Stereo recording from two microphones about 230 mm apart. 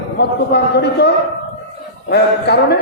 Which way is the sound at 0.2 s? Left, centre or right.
Left.